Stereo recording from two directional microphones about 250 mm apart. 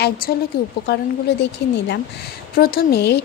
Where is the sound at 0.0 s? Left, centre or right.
Left.